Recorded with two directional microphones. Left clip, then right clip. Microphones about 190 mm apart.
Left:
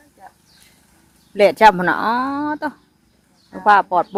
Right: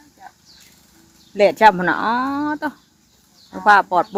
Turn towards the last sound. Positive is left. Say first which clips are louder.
# even
turn(degrees=0)  # may be behind; listen again after turning